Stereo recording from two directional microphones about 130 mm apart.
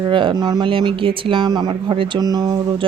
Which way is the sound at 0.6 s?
40° right (ahead or behind).